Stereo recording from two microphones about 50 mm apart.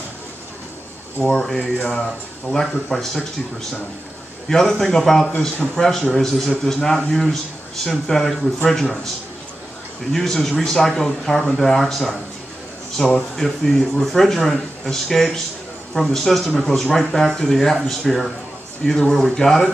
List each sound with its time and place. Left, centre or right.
1.2 s speech: centre
4.5 s speech: centre
10.1 s speech: centre